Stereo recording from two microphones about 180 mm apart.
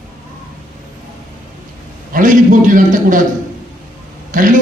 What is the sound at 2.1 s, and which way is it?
A man's voice, 45° right (ahead or behind).